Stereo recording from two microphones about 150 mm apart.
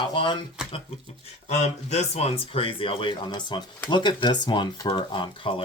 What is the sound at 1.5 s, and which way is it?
Speech, 50° left (ahead or behind).